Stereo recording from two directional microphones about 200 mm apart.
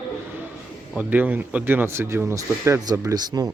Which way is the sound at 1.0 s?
10° right (ahead or behind).